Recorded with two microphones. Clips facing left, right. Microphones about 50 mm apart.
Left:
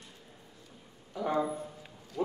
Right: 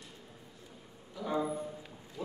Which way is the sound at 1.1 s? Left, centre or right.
Left.